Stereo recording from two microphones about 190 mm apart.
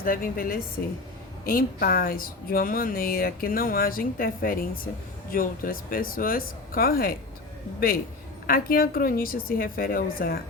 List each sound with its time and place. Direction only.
0.0 s a woman's voice: 50° left (ahead or behind)
8.4 s a woman's voice: 50° left (ahead or behind)